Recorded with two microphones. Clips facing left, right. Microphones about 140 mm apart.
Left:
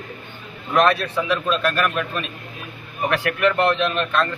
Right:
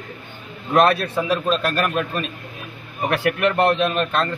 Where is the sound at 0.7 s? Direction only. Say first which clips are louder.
Right 1 dB; 40° right (ahead or behind).